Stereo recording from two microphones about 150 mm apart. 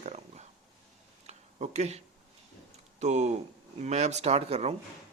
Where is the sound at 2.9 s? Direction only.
50° right (ahead or behind).